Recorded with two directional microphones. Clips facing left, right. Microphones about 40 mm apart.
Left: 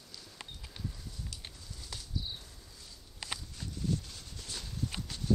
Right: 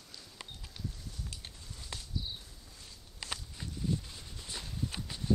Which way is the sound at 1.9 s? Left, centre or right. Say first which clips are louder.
Right 2 dB; right.